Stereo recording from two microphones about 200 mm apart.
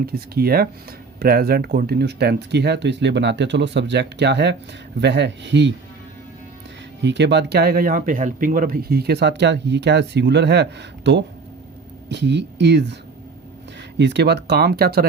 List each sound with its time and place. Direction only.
0.0 s speech: 50° right (ahead or behind)
7.0 s speech: 60° right (ahead or behind)
14.0 s speech: 60° right (ahead or behind)